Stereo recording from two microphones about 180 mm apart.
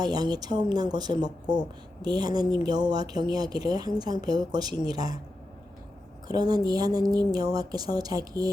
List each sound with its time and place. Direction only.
0.0 s a woman's voice: 20° right (ahead or behind)
6.2 s a woman's voice: 20° right (ahead or behind)